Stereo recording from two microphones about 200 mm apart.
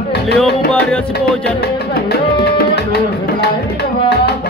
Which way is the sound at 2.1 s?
55° left (ahead or behind).